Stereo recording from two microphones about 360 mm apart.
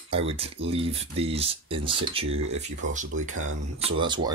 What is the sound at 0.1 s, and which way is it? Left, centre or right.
Speech, centre.